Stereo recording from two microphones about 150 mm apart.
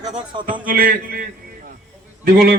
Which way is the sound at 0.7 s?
75° right (ahead or behind).